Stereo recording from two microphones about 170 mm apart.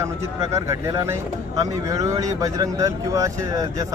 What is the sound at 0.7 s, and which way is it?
Speech, 15° right (ahead or behind).